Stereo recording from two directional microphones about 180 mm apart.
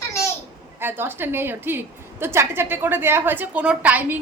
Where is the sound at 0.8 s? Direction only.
10° right (ahead or behind).